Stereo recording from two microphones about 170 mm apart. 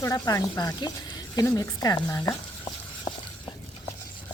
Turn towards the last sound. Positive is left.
turn(degrees=25)  # may be behind; listen again after turning